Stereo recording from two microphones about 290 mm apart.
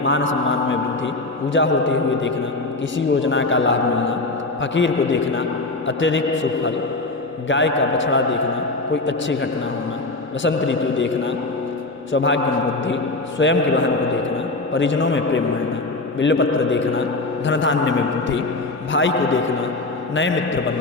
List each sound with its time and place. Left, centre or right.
0.0 s a man's voice: left
13.4 s a man's voice: left